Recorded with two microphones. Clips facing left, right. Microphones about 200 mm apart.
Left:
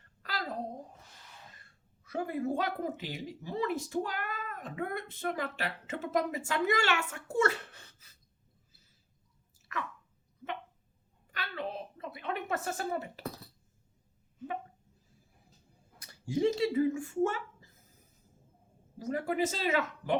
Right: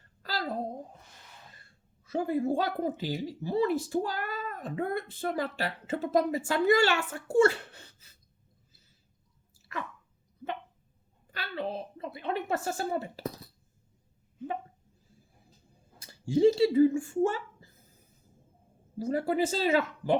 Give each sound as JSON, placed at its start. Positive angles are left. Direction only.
{"t": 0.2, "sound": "a sound", "side_deg": -30}
{"t": 2.0, "sound": "speech", "side_deg": -30}
{"t": 9.6, "sound": "chewing", "side_deg": -30}
{"t": 11.3, "sound": "a sound", "side_deg": -30}
{"t": 16.0, "sound": "speech", "side_deg": -30}
{"t": 18.9, "sound": "speech", "side_deg": -30}